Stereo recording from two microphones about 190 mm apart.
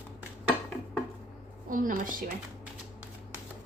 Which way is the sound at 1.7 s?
45° right (ahead or behind).